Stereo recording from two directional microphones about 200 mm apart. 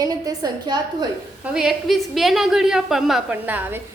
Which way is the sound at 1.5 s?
Centre (ahead or behind).